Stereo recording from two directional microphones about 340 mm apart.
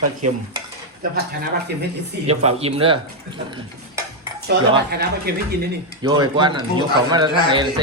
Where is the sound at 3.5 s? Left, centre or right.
Centre.